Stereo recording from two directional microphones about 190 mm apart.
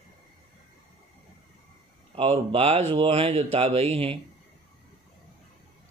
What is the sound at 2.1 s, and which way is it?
A man's voice, 30° right (ahead or behind).